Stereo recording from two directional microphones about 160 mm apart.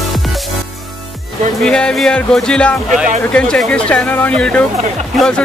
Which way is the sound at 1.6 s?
5° left (ahead or behind).